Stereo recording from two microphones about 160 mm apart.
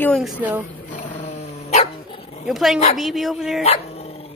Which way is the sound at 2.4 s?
Centre (ahead or behind).